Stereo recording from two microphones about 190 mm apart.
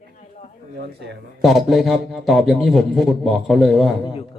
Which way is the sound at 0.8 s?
60° right (ahead or behind).